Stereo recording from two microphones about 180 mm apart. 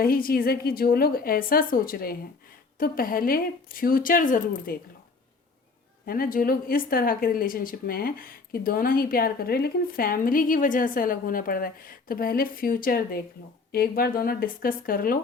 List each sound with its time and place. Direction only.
0.0 s a woman's voice: 55° left (ahead or behind)
6.1 s speech: 50° left (ahead or behind)